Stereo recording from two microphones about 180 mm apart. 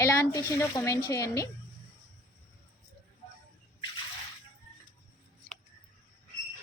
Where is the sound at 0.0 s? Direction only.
15° left (ahead or behind).